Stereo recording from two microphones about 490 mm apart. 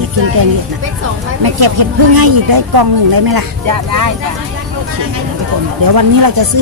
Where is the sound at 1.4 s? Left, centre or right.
Right.